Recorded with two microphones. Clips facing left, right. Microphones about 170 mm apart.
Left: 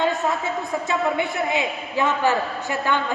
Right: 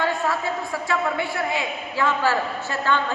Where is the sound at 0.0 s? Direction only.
20° left (ahead or behind).